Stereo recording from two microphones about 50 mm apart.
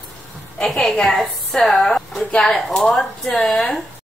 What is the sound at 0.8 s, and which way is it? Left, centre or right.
A woman's voice, centre.